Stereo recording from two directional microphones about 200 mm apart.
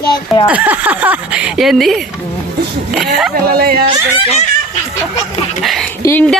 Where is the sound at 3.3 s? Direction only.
50° right (ahead or behind).